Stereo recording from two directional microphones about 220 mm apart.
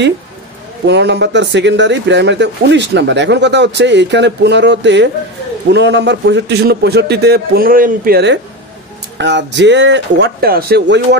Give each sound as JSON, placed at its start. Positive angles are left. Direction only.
{"t": 0.8, "sound": "speech", "side_deg": -50}